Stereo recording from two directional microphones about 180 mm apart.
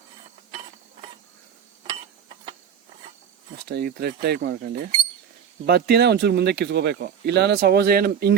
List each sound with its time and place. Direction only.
3.7 s speech: 65° right (ahead or behind)